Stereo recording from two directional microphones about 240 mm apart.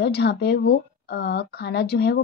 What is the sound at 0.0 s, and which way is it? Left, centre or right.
A woman's voice, left.